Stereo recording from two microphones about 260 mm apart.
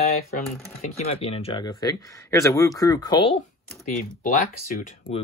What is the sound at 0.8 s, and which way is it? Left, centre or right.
Speech, left.